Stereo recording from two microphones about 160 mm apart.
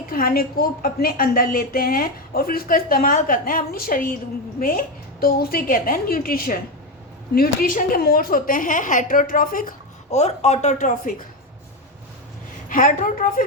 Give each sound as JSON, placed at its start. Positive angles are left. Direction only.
{"t": 0.1, "sound": "a woman's voice", "side_deg": 70}
{"t": 10.1, "sound": "speech", "side_deg": 45}
{"t": 12.6, "sound": "a woman's voice", "side_deg": 60}